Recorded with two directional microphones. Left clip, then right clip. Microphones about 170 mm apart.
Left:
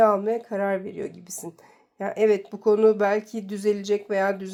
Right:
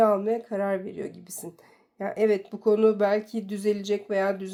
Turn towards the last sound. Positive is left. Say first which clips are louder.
# left 2 dB
turn(degrees=20)  # may be behind; listen again after turning